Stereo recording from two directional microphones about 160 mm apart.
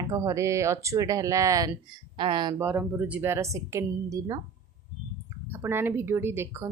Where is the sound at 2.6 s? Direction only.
15° right (ahead or behind).